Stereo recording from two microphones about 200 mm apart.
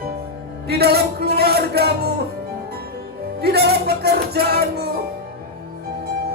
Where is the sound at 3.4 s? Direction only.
55° right (ahead or behind).